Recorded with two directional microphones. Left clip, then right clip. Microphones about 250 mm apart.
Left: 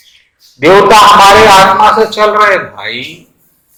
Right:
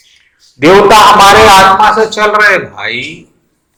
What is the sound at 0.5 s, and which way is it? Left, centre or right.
Speech, centre.